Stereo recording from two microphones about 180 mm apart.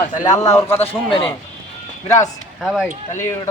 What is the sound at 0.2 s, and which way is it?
Speech, 20° left (ahead or behind).